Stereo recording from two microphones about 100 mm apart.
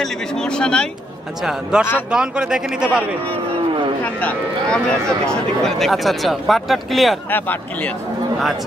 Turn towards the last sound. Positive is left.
turn(degrees=15)  # may be behind; listen again after turning